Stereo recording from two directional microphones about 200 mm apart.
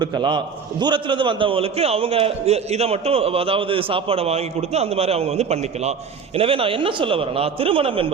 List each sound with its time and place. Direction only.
0.0 s a man's voice: 25° right (ahead or behind)